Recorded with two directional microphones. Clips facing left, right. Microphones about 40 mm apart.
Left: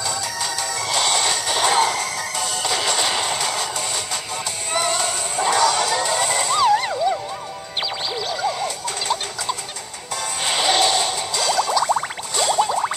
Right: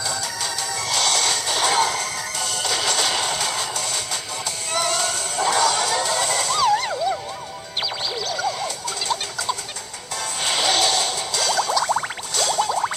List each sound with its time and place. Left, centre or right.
0.8 s music: left
4.7 s music: left
8.3 s music: left
10.4 s a sound: centre